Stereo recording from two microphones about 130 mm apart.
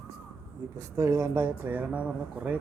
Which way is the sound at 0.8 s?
25° right (ahead or behind).